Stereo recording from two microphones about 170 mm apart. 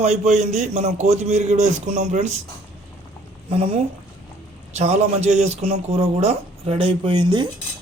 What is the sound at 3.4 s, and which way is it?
A man's voice, 35° right (ahead or behind).